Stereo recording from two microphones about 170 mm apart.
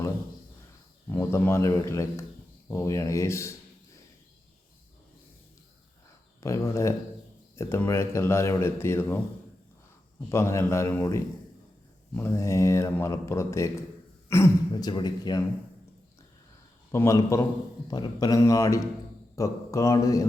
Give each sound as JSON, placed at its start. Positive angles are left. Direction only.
{"t": 1.1, "sound": "speech", "side_deg": 15}
{"t": 6.4, "sound": "speech", "side_deg": 15}
{"t": 10.2, "sound": "speech", "side_deg": 15}
{"t": 16.9, "sound": "speech", "side_deg": 15}